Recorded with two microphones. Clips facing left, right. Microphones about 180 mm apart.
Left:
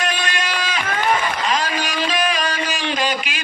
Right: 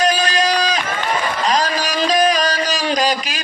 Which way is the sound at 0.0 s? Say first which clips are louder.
Right 7 dB; 35° right (ahead or behind).